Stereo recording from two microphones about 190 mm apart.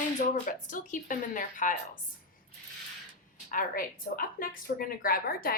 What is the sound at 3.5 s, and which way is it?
A woman's voice, 45° left (ahead or behind).